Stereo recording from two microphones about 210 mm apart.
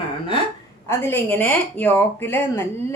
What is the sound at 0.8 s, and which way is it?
Speech, 10° left (ahead or behind).